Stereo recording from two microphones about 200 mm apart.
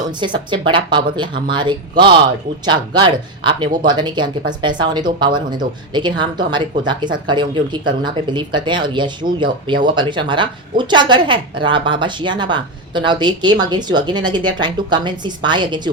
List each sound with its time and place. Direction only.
0.1 s speech: 25° right (ahead or behind)